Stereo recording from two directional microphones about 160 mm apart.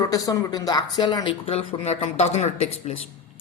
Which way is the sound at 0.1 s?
20° left (ahead or behind).